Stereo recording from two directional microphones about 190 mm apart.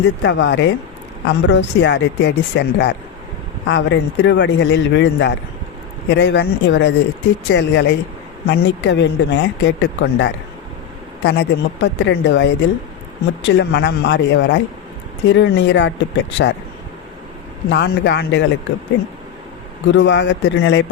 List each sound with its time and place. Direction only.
0.0 s a woman's voice: 70° left (ahead or behind)
17.7 s a woman's voice: 65° left (ahead or behind)
19.9 s a woman's voice: 70° left (ahead or behind)